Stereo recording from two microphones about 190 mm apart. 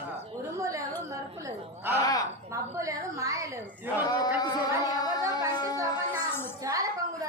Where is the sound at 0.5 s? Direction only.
15° right (ahead or behind).